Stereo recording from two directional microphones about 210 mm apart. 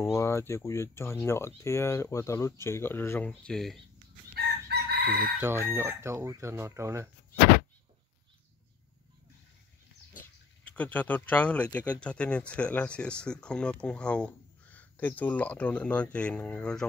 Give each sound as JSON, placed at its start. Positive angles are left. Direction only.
{"t": 0.0, "sound": "speech", "side_deg": 15}
{"t": 4.6, "sound": "chicken", "side_deg": -50}
{"t": 5.4, "sound": "speech", "side_deg": -10}
{"t": 10.6, "sound": "speech", "side_deg": 5}